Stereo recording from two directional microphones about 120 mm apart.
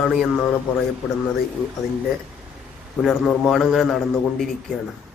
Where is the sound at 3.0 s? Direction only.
Centre (ahead or behind).